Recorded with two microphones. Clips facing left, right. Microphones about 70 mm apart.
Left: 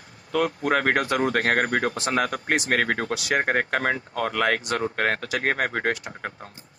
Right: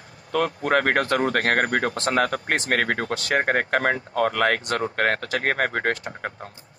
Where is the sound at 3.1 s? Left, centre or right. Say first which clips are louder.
Right 1 dB; centre.